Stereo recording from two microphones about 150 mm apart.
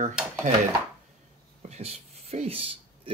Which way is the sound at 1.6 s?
45° right (ahead or behind).